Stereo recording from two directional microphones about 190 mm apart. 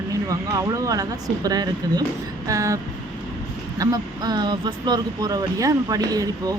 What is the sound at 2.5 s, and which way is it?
Vehicle, 15° right (ahead or behind).